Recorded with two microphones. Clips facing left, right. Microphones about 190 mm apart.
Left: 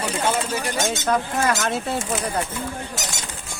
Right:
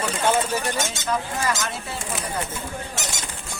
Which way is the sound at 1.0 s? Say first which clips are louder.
Left 4 dB; 60° left (ahead or behind).